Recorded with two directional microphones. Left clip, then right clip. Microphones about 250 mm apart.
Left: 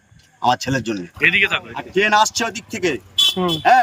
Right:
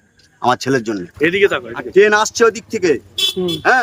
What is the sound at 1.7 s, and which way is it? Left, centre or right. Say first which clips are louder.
Speech: right 3 dB; centre.